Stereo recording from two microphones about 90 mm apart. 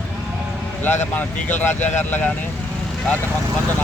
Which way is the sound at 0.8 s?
20° left (ahead or behind).